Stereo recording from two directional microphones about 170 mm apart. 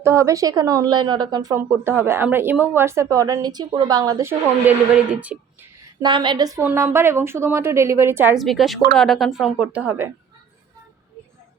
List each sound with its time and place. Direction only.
0.0 s speech: 15° right (ahead or behind)
6.0 s speech: 25° right (ahead or behind)
6.6 s a woman's voice: 15° right (ahead or behind)
8.4 s speech: centre (ahead or behind)